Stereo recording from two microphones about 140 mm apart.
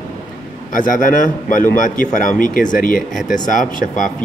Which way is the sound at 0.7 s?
75° left (ahead or behind).